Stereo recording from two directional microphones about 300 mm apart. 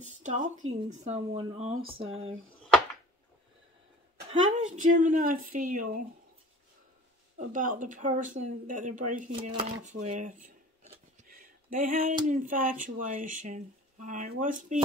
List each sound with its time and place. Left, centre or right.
0.0 s speech: right
4.3 s speech: right
7.3 s speech: right